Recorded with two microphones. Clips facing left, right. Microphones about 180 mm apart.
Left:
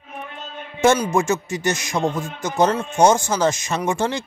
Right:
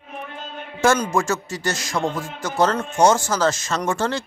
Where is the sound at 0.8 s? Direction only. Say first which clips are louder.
Left 2 dB; 15° left (ahead or behind).